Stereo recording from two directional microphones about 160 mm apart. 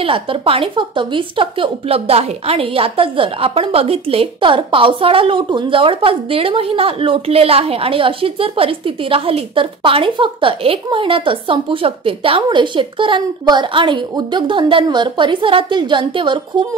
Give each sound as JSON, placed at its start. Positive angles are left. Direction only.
{"t": 0.0, "sound": "a woman's voice", "side_deg": -35}